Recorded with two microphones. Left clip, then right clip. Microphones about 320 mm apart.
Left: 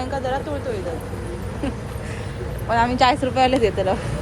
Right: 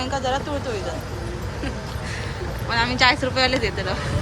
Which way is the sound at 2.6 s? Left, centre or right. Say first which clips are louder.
Left 1 dB; centre.